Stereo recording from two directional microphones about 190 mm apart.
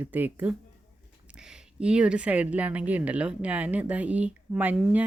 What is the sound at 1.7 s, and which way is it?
Speech, 5° right (ahead or behind).